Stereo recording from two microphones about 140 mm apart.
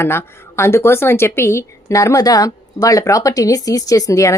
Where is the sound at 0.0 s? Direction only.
15° left (ahead or behind).